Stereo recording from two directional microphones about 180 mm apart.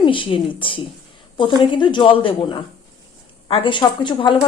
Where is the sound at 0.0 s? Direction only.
30° left (ahead or behind).